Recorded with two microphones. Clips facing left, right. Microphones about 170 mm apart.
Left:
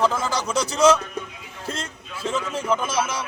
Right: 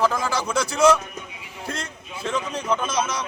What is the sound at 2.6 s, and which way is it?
Speech, 10° left (ahead or behind).